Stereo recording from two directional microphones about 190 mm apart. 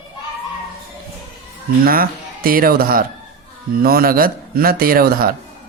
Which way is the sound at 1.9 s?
50° right (ahead or behind).